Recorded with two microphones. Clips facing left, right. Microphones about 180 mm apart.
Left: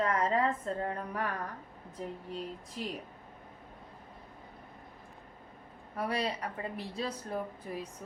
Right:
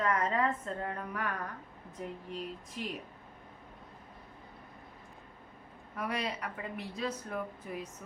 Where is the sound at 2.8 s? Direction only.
35° left (ahead or behind).